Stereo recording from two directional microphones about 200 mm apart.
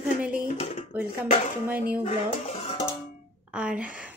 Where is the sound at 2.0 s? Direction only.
35° left (ahead or behind).